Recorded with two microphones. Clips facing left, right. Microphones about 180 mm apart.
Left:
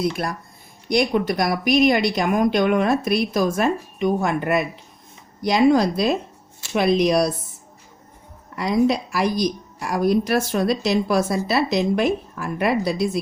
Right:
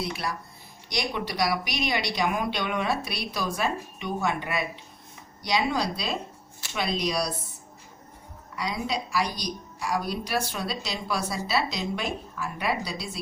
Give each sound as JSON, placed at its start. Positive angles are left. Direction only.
{"t": 0.9, "sound": "a woman's voice", "side_deg": 50}
{"t": 5.5, "sound": "a woman's voice", "side_deg": 50}
{"t": 8.5, "sound": "a woman's voice", "side_deg": 50}